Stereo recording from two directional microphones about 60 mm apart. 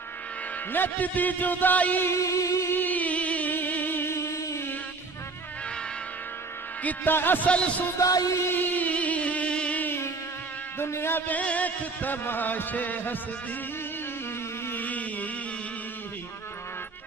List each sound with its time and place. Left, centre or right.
0.7 s a man's voice: left
2.0 s music: left
2.7 s a sound: left
6.8 s a man's voice: left
7.2 s music: left
7.4 s a man's voice: centre
8.0 s music: left
8.5 s music: left
10.8 s music: left
14.7 s a sound: left